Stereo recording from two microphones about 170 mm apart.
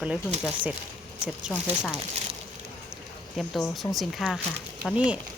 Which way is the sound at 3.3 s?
Centre (ahead or behind).